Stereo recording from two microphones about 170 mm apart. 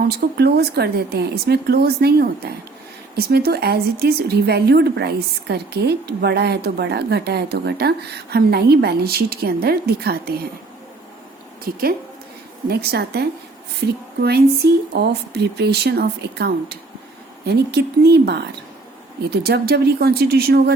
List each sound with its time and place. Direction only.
0.3 s a woman's voice: 70° right (ahead or behind)
11.6 s a woman's voice: 60° right (ahead or behind)